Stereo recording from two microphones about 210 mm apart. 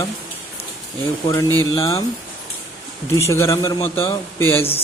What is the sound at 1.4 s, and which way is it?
Speech, 20° right (ahead or behind).